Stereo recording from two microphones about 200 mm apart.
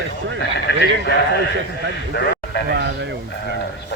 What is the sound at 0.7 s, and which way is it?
Speech, 60° left (ahead or behind).